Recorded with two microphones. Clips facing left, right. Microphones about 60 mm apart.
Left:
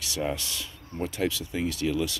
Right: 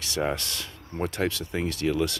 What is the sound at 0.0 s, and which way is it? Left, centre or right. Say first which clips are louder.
Speech: right 2 dB; right.